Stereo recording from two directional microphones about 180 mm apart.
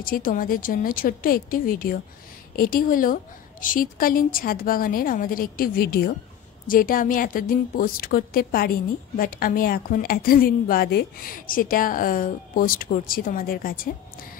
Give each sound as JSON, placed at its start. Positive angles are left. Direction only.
{"t": 0.0, "sound": "a woman's voice", "side_deg": 50}